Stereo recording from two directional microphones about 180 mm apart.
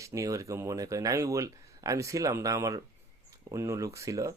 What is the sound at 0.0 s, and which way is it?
Speech, 15° right (ahead or behind).